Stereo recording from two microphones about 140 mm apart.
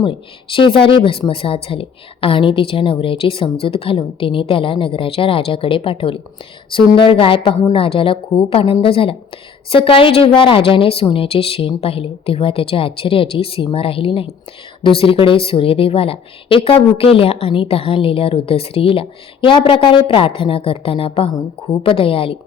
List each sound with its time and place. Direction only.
0.0 s speech: 35° left (ahead or behind)